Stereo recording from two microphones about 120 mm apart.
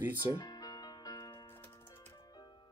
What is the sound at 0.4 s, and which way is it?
Music, 35° left (ahead or behind).